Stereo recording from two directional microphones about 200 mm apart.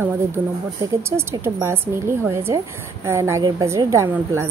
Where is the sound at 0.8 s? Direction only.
15° right (ahead or behind).